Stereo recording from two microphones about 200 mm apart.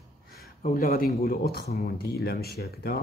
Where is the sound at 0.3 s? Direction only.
50° left (ahead or behind).